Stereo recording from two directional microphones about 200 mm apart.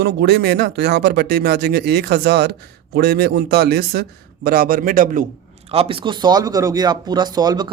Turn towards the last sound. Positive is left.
turn(degrees=-20)  # may be behind; listen again after turning